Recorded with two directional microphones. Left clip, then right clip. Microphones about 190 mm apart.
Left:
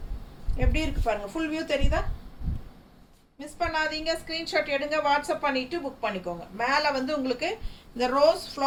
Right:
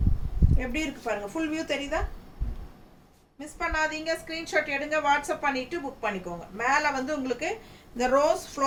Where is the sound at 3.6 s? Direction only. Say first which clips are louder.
Left 1 dB; 10° right (ahead or behind).